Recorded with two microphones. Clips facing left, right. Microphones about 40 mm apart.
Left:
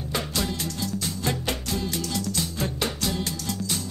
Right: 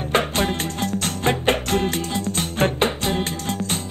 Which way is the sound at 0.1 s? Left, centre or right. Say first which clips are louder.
Right 8 dB; right.